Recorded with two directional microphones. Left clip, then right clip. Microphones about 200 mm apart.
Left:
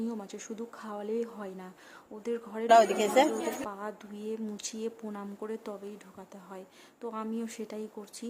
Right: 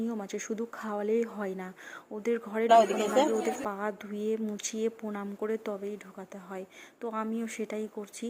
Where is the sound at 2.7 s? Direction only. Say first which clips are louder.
Left 1 dB; 10° left (ahead or behind).